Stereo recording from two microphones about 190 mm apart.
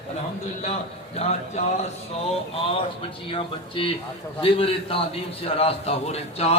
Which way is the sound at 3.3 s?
25° left (ahead or behind).